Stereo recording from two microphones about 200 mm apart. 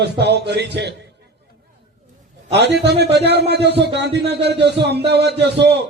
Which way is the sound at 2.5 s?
60° right (ahead or behind).